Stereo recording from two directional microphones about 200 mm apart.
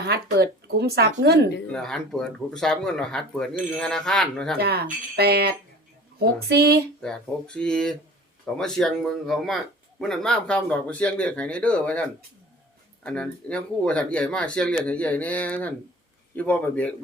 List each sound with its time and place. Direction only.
0.0 s speech: 55° right (ahead or behind)
1.7 s speech: centre (ahead or behind)
4.5 s speech: 55° right (ahead or behind)
7.0 s speech: 5° left (ahead or behind)